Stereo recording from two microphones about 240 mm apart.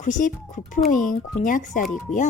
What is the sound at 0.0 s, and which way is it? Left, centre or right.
Speech, left.